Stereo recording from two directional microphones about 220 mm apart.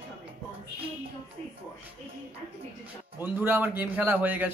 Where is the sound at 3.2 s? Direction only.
10° right (ahead or behind).